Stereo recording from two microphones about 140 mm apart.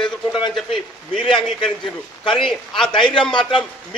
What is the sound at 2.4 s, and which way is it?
Speech, 5° left (ahead or behind).